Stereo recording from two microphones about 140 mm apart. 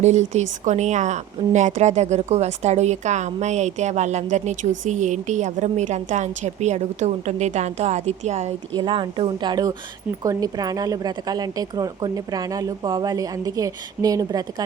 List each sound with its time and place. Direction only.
0.0 s speech: 55° right (ahead or behind)
8.7 s speech: 35° right (ahead or behind)